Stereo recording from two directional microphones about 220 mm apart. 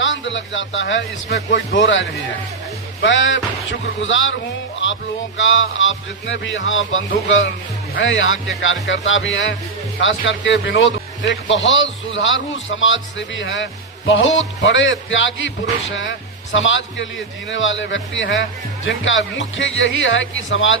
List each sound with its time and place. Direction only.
0.0 s speech: 60° left (ahead or behind)
4.8 s music: 60° left (ahead or behind)
5.4 s speech: 60° left (ahead or behind)